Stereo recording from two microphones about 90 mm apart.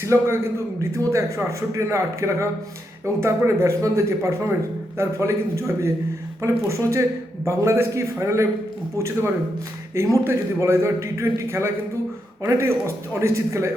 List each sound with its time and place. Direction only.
0.0 s a man's voice: 30° right (ahead or behind)